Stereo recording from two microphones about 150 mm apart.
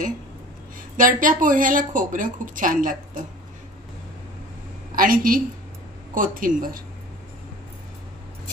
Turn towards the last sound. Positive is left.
turn(degrees=-65)  # may be behind; listen again after turning